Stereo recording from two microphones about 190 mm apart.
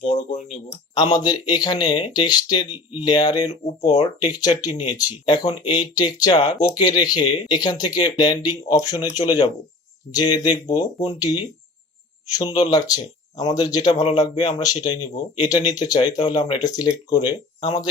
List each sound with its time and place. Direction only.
0.0 s speech: 30° left (ahead or behind)
0.9 s speech: 20° left (ahead or behind)
3.5 s speech: 35° left (ahead or behind)
3.9 s speech: 20° left (ahead or behind)
13.9 s speech: 30° left (ahead or behind)
14.2 s speech: 20° left (ahead or behind)